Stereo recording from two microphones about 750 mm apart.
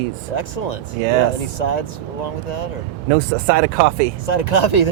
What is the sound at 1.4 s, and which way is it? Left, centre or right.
Speech, left.